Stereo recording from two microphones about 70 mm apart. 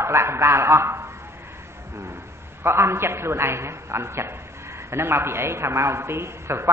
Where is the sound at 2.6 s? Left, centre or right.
Right.